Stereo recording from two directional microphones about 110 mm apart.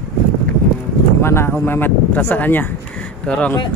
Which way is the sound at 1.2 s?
20° left (ahead or behind).